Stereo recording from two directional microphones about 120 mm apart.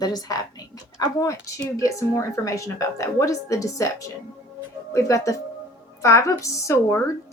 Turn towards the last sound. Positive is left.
turn(degrees=25)  # may be behind; listen again after turning